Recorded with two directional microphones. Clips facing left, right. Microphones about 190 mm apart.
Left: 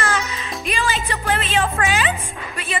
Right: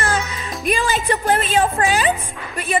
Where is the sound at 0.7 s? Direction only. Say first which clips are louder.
Right 5 dB; 50° right (ahead or behind).